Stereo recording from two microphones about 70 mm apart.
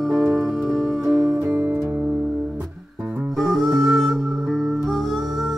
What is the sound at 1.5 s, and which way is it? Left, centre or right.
Music, right.